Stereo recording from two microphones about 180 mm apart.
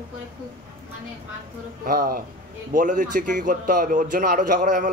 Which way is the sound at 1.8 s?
50° right (ahead or behind).